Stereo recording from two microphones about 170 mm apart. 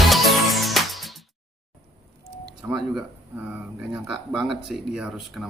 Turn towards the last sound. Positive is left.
turn(degrees=0)  # may be behind; listen again after turning